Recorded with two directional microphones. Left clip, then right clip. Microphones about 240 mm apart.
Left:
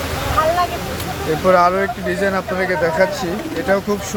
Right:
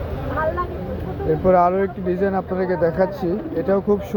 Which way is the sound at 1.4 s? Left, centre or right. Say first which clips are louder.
Left 3 dB; centre.